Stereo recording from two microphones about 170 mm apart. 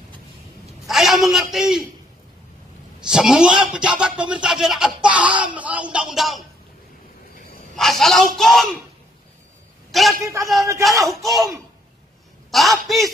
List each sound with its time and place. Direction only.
0.8 s a man's voice: centre (ahead or behind)
3.0 s speech: 5° right (ahead or behind)
7.7 s speech: centre (ahead or behind)
9.8 s a sound: centre (ahead or behind)
10.2 s speech: 20° right (ahead or behind)
11.1 s speech: centre (ahead or behind)
12.4 s speech: centre (ahead or behind)